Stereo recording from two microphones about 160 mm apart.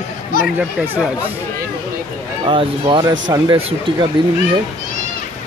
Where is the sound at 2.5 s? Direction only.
30° right (ahead or behind).